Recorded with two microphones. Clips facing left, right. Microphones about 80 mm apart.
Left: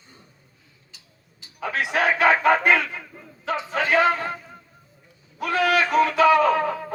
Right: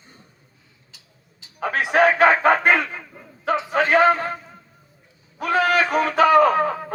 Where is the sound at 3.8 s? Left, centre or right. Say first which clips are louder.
Right 3 dB; right.